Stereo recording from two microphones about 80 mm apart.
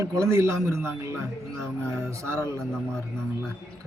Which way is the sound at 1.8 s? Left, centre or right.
Centre.